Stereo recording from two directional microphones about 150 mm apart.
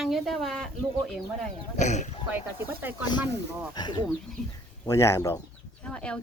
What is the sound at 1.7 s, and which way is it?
Speech, 50° left (ahead or behind).